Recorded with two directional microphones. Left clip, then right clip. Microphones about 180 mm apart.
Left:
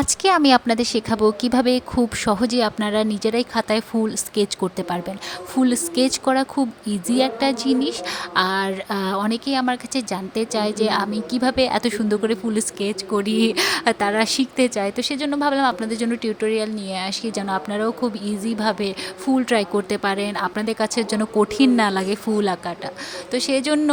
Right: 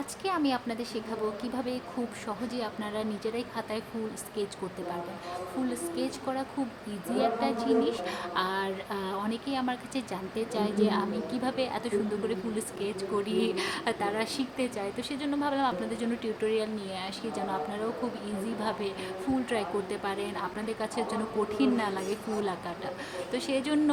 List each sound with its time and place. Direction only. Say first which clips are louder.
0.0 s a woman's voice: left 14 dB; 50° left (ahead or behind)
5.6 s a woman's voice: left 15 dB; 50° left (ahead or behind)